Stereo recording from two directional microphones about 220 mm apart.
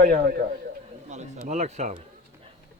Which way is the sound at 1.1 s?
30° right (ahead or behind).